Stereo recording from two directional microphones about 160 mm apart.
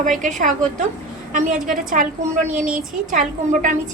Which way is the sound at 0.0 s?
50° right (ahead or behind).